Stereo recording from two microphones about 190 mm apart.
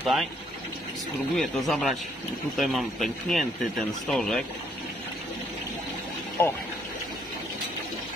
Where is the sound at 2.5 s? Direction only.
Centre (ahead or behind).